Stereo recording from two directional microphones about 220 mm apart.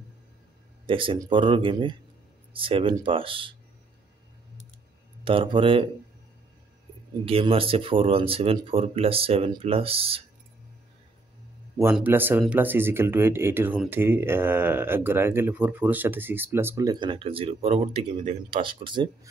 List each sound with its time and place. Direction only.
0.8 s speech: 25° right (ahead or behind)
5.2 s speech: 25° right (ahead or behind)
7.2 s speech: 25° right (ahead or behind)
11.8 s speech: 10° right (ahead or behind)